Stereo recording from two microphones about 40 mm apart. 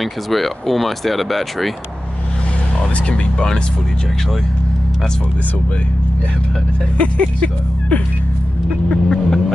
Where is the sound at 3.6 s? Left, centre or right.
Left.